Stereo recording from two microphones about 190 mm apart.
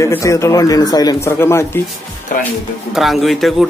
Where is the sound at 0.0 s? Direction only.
15° left (ahead or behind).